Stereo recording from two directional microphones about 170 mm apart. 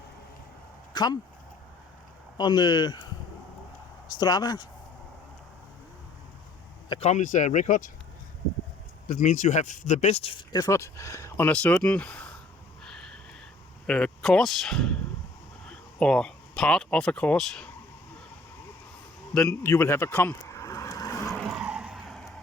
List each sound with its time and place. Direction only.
0.9 s speech: 25° left (ahead or behind)
2.4 s speech: 25° left (ahead or behind)
4.1 s speech: 25° left (ahead or behind)
7.0 s speech: 45° left (ahead or behind)
9.0 s speech: 45° left (ahead or behind); by 12.3 s 10° left (ahead or behind)
13.8 s speech: 5° left (ahead or behind)
19.3 s vehicle: 10° left (ahead or behind)
21.2 s vehicle: centre (ahead or behind)